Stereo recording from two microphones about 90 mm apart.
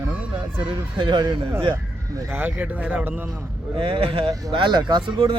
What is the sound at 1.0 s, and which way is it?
Speech, 55° right (ahead or behind).